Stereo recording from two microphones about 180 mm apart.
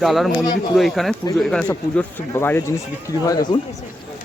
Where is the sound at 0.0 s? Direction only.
Centre (ahead or behind); by 3.6 s 20° left (ahead or behind).